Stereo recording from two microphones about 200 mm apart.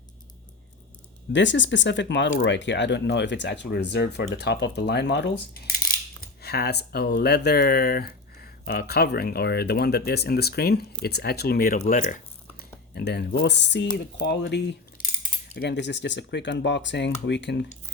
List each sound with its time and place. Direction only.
1.3 s speech: 65° left (ahead or behind); by 12.1 s 40° left (ahead or behind)
12.9 s speech: 55° left (ahead or behind)